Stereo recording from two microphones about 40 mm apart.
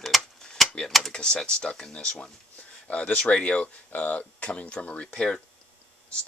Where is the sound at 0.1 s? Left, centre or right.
Centre.